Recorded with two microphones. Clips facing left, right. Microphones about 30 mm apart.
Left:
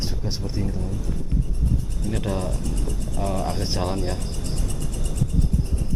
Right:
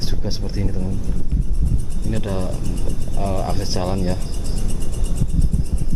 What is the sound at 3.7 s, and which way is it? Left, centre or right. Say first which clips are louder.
Cricket: right 3 dB; centre.